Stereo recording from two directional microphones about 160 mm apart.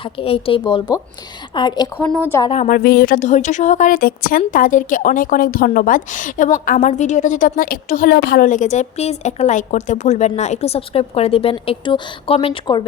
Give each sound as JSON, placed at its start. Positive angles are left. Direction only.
{"t": 0.0, "sound": "a woman's voice", "side_deg": 35}
{"t": 2.1, "sound": "a woman's voice", "side_deg": 15}
{"t": 2.6, "sound": "a woman's voice", "side_deg": 55}
{"t": 3.2, "sound": "a woman's voice", "side_deg": 50}